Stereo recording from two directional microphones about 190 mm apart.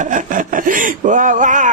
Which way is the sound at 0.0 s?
40° right (ahead or behind).